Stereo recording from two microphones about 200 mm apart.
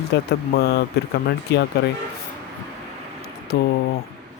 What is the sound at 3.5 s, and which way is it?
Speech, 55° left (ahead or behind).